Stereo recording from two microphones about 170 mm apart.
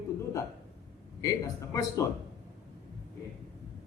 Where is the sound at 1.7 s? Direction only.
20° left (ahead or behind).